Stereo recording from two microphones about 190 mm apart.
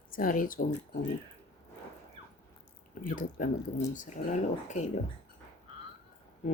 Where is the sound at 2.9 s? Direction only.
45° left (ahead or behind).